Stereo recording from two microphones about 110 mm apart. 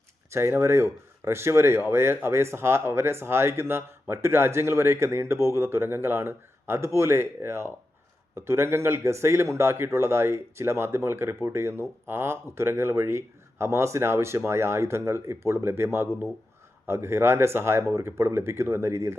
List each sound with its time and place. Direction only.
0.3 s speech: 25° right (ahead or behind)